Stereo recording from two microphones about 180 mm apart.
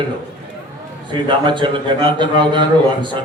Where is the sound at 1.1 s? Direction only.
25° right (ahead or behind).